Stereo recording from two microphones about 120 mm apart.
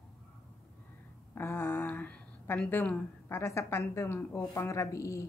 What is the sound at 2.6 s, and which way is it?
A woman's voice, 15° left (ahead or behind).